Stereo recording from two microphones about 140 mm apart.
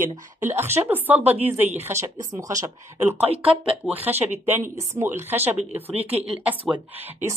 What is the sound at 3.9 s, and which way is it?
A woman's voice, 15° right (ahead or behind).